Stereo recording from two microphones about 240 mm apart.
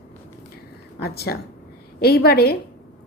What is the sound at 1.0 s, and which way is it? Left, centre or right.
A woman's voice, left.